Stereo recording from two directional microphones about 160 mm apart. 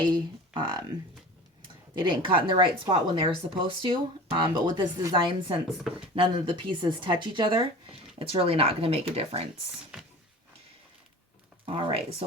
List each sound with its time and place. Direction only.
0.0 s speech: 30° right (ahead or behind)
2.0 s speech: 30° right (ahead or behind)
9.9 s speech: 5° right (ahead or behind)
11.6 s speech: 35° right (ahead or behind)